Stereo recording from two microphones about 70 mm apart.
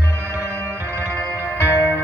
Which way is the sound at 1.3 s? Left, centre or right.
Right.